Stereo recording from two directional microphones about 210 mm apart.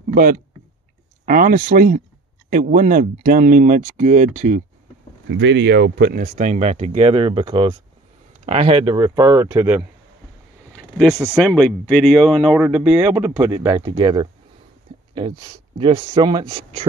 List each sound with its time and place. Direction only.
0.1 s speech: 40° right (ahead or behind)
5.3 s speech: 60° right (ahead or behind); by 9.8 s 10° right (ahead or behind)
10.7 s speech: 5° left (ahead or behind); by 16.8 s 25° right (ahead or behind)